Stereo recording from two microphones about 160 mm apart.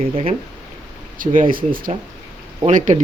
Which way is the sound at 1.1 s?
55° right (ahead or behind).